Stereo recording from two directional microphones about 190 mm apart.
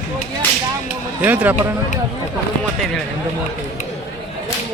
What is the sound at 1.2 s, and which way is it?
Speech, 10° right (ahead or behind).